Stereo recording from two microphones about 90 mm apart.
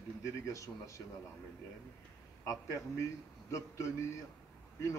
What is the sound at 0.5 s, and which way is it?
Speech, 35° left (ahead or behind).